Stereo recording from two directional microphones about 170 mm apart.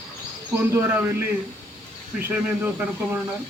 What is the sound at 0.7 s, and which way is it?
Speech, 15° right (ahead or behind).